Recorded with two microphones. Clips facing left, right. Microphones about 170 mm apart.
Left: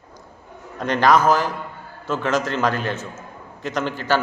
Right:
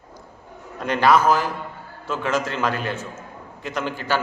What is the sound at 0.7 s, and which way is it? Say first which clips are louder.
A man's voice: left 1 dB; 5° right (ahead or behind).